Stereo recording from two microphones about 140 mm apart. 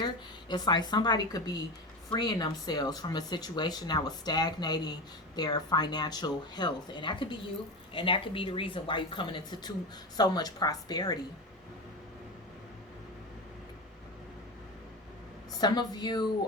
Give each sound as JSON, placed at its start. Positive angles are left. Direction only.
{"t": 0.0, "sound": "speech", "side_deg": 30}
{"t": 15.5, "sound": "speech", "side_deg": 30}